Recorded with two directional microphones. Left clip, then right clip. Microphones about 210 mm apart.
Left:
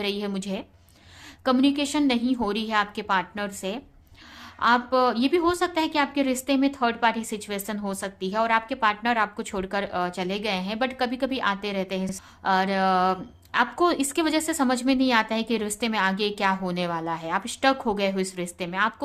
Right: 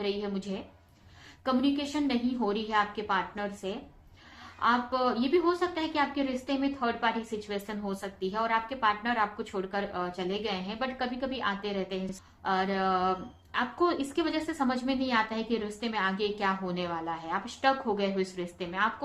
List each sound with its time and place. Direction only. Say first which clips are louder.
0.0 s a woman's voice: left 4 dB; 40° left (ahead or behind)